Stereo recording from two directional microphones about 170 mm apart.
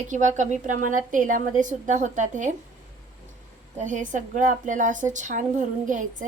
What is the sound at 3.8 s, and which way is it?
A woman's voice, 45° right (ahead or behind).